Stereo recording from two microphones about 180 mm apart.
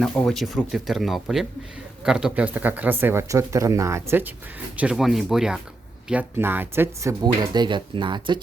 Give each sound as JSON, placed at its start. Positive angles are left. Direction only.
{"t": 0.0, "sound": "speech", "side_deg": 0}